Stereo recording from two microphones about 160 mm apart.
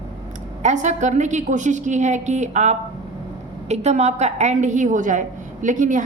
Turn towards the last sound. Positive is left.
turn(degrees=-50)  # may be behind; listen again after turning